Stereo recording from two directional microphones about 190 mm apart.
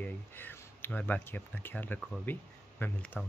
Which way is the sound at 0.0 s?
10° left (ahead or behind).